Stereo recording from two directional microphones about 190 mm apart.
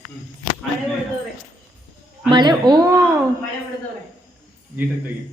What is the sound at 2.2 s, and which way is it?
Speech, 25° right (ahead or behind).